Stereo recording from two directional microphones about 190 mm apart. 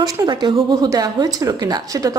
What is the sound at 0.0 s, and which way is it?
A woman's voice, 20° right (ahead or behind).